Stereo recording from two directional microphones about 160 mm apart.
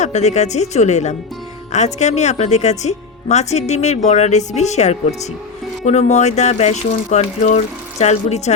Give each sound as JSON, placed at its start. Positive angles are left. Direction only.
{"t": 0.0, "sound": "a woman's voice", "side_deg": 45}